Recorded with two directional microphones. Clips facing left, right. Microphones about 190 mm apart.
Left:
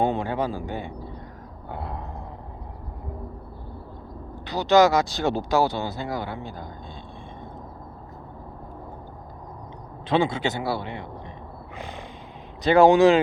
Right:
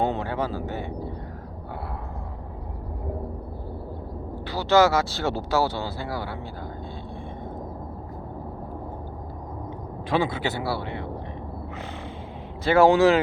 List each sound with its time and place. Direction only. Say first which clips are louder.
0.0 s a sound: left 2 dB; 15° left (ahead or behind)
4.4 s speech: left 2 dB; 20° left (ahead or behind)
10.1 s speech: left 2 dB; 20° left (ahead or behind)
12.6 s speech: left 2 dB; 15° left (ahead or behind)